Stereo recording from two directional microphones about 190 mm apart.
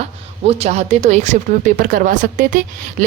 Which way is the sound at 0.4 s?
35° right (ahead or behind).